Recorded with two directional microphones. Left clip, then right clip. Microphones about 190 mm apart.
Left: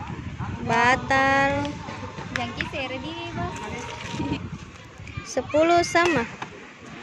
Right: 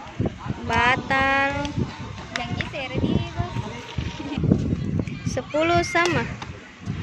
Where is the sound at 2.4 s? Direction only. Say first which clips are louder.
Even; 60° left (ahead or behind).